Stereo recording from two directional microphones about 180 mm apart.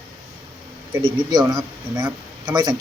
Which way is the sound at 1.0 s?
25° right (ahead or behind).